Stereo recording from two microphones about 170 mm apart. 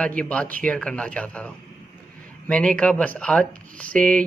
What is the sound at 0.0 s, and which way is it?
Speech, 5° left (ahead or behind).